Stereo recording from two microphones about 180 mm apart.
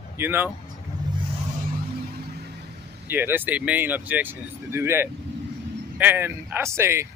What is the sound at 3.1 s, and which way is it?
Speech, 10° right (ahead or behind).